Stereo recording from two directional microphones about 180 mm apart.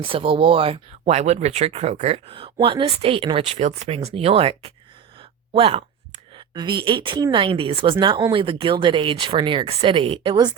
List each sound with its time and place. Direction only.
0.0 s speech: 30° right (ahead or behind)